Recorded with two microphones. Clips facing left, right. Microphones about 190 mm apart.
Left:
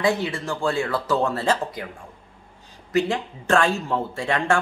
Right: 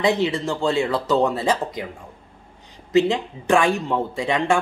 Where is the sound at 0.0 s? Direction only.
20° right (ahead or behind).